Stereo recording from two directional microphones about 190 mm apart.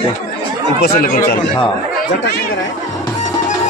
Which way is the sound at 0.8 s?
50° left (ahead or behind).